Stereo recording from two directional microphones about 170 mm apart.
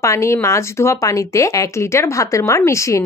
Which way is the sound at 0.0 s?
15° left (ahead or behind).